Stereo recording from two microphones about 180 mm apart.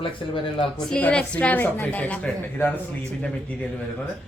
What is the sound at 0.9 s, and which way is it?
A woman's voice, 5° left (ahead or behind).